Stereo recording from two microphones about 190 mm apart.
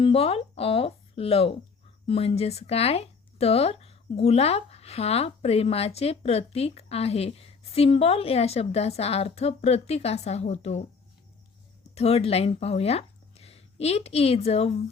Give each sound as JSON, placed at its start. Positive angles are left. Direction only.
{"t": 0.0, "sound": "speech", "side_deg": 30}
{"t": 11.9, "sound": "speech", "side_deg": 35}